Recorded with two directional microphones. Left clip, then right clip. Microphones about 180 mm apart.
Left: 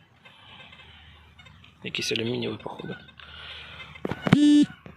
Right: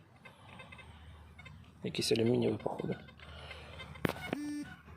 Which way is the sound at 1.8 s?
15° right (ahead or behind).